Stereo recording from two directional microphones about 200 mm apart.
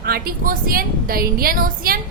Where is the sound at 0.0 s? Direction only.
50° right (ahead or behind).